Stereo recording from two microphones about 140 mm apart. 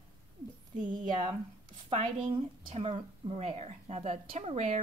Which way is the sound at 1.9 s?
45° right (ahead or behind).